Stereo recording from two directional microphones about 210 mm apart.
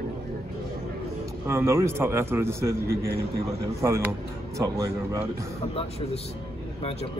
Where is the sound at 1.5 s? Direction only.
15° right (ahead or behind).